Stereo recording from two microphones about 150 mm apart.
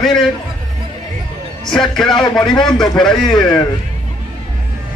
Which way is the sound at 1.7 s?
5° left (ahead or behind).